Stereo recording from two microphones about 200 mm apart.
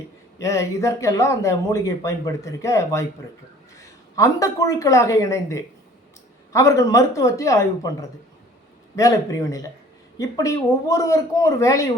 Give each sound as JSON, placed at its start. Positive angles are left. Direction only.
{"t": 0.3, "sound": "a woman's voice", "side_deg": 15}
{"t": 9.0, "sound": "speech", "side_deg": 15}